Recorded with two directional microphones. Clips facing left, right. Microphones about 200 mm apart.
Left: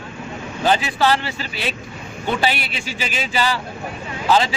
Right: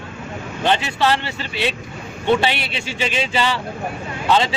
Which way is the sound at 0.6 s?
5° left (ahead or behind).